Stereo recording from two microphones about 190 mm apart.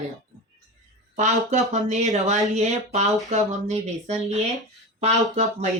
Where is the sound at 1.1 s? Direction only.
40° right (ahead or behind).